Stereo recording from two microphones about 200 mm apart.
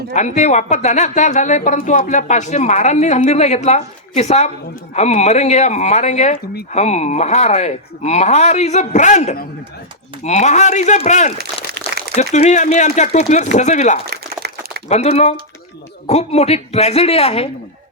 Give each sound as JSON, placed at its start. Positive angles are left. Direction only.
{"t": 0.1, "sound": "speech", "side_deg": 35}
{"t": 14.0, "sound": "a sound", "side_deg": -55}
{"t": 14.8, "sound": "speech", "side_deg": 35}